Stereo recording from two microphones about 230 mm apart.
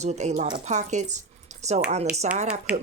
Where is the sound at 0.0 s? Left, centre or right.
Right.